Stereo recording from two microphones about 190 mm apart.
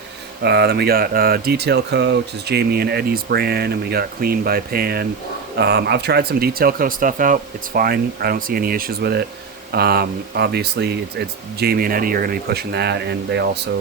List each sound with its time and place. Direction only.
0.4 s speech: 60° right (ahead or behind)